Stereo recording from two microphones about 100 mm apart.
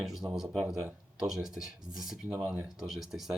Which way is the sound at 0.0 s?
5° right (ahead or behind).